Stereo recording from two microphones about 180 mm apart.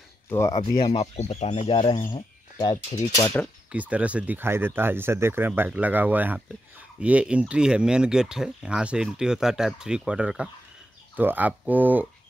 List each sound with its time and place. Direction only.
0.3 s speech: 15° left (ahead or behind)
0.9 s speech: 35° left (ahead or behind)
3.4 s speech: 10° left (ahead or behind)
3.7 s speech: 10° right (ahead or behind)